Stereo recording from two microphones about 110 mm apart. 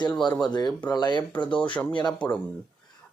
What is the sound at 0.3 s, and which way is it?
Speech, 40° left (ahead or behind).